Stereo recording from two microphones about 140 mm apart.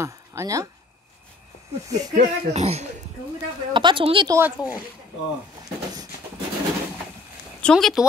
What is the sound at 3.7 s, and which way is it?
Speech, 35° right (ahead or behind).